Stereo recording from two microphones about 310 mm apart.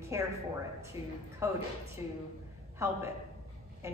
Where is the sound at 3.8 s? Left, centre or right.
Centre.